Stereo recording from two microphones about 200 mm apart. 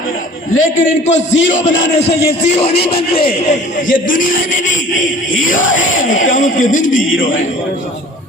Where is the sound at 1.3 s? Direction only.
70° left (ahead or behind).